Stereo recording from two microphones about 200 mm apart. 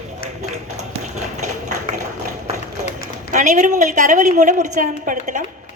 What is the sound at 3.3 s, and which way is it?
A woman's voice, 40° right (ahead or behind).